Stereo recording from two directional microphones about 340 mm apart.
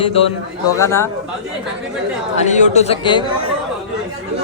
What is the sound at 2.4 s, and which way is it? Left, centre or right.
Speech, left.